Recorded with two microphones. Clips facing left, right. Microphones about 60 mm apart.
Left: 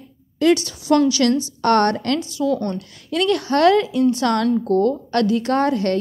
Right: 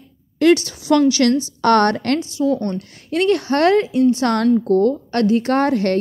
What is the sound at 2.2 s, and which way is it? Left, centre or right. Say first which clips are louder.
A woman's voice: right 2 dB; right.